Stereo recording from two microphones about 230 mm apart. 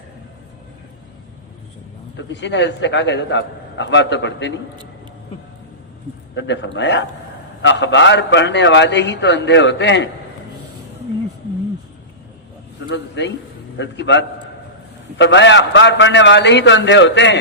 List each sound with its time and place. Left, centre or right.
2.1 s a man's voice: left
6.3 s a man's voice: left
12.9 s a man's voice: left